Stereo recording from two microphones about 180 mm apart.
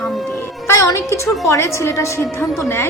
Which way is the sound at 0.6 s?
15° left (ahead or behind).